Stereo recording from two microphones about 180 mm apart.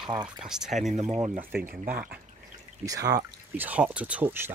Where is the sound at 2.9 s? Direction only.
20° right (ahead or behind).